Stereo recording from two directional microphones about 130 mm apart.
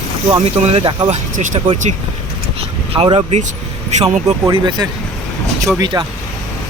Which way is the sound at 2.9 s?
45° right (ahead or behind).